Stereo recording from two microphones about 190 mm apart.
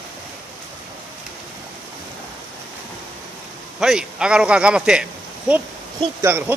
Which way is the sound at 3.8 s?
5° right (ahead or behind).